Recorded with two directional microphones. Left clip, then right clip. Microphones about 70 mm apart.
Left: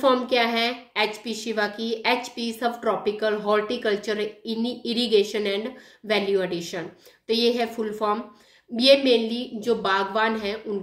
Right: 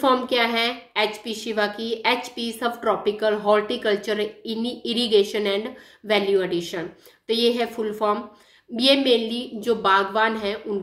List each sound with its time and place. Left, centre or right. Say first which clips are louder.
0.0 s a woman's voice: right 1 dB; right